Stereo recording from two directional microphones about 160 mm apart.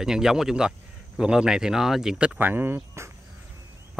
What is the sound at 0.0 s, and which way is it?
Speech, 5° right (ahead or behind).